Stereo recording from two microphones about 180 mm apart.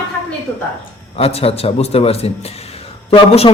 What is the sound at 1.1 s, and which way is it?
A man's voice, 35° left (ahead or behind).